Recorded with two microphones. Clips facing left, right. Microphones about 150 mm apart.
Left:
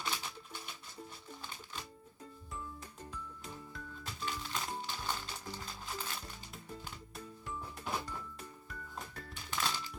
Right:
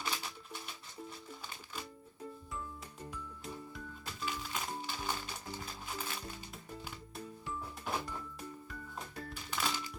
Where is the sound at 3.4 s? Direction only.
Centre (ahead or behind).